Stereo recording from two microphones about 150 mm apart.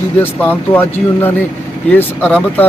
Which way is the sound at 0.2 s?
10° left (ahead or behind).